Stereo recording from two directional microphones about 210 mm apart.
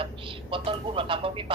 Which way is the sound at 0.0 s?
25° right (ahead or behind).